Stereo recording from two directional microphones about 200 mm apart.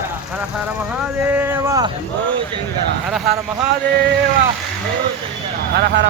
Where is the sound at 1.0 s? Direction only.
10° right (ahead or behind).